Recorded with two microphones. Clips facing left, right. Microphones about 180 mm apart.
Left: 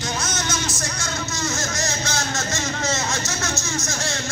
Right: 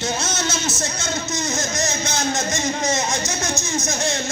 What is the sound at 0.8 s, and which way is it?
Music, 20° right (ahead or behind).